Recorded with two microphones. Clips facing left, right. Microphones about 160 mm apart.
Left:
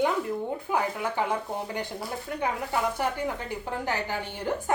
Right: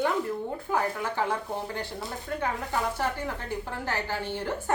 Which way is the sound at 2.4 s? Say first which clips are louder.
Left 2 dB; 15° left (ahead or behind).